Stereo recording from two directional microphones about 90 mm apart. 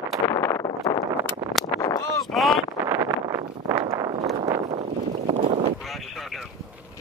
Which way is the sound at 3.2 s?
45° right (ahead or behind).